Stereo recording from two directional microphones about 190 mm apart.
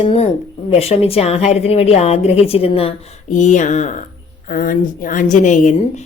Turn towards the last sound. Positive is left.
turn(degrees=40)  # may be behind; listen again after turning